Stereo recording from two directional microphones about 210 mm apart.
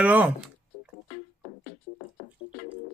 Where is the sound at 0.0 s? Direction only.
5° right (ahead or behind).